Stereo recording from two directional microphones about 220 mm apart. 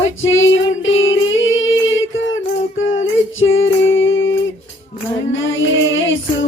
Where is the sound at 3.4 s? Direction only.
60° left (ahead or behind).